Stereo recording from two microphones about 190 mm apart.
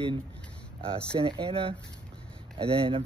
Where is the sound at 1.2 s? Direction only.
30° right (ahead or behind).